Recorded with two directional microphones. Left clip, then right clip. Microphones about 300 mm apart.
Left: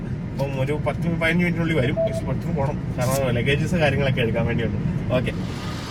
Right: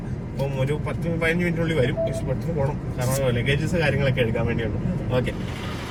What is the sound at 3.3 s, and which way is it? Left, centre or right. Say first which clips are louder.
Speech: left 1 dB; centre.